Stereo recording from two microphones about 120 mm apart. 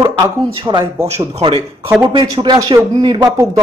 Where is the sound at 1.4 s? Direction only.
50° right (ahead or behind).